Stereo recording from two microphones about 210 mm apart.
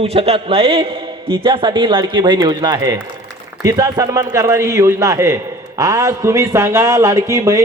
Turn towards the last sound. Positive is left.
turn(degrees=-15)  # may be behind; listen again after turning